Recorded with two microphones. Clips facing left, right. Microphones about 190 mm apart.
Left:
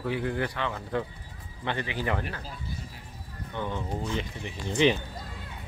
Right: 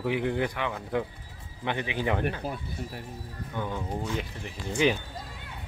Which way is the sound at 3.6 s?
10° right (ahead or behind).